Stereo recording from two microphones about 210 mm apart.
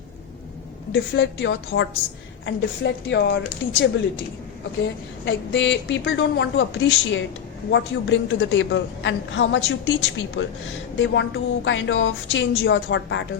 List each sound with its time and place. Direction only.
0.9 s a woman's voice: 60° left (ahead or behind)
5.2 s a woman's voice: 60° left (ahead or behind)